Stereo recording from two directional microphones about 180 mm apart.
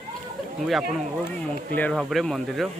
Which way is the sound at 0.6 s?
Centre (ahead or behind).